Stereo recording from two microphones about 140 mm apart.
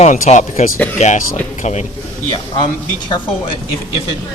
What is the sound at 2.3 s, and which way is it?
Speech, 30° left (ahead or behind).